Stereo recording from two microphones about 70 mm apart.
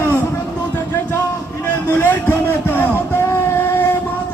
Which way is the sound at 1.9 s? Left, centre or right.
Left.